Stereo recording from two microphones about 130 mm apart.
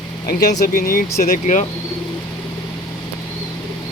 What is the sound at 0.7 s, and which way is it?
Speech, 90° left.